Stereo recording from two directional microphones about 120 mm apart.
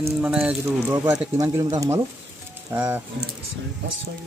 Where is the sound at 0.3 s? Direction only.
5° right (ahead or behind).